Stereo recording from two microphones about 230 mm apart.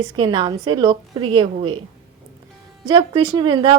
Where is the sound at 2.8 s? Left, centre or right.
Centre.